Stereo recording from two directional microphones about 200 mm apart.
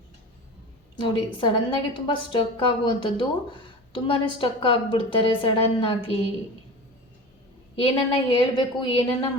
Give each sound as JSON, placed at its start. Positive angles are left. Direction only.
{"t": 0.9, "sound": "a woman's voice", "side_deg": 25}
{"t": 7.8, "sound": "a woman's voice", "side_deg": 25}